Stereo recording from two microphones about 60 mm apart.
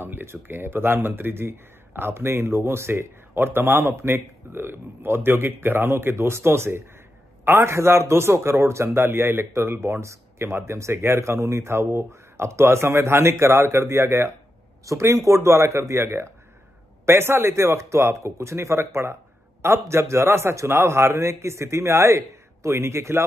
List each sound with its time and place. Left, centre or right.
0.0 s a man's voice: right